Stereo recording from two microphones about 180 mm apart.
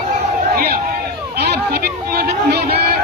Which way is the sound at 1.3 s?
65° right (ahead or behind).